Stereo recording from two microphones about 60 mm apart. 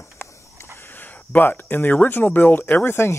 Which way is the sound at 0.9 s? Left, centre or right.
Left.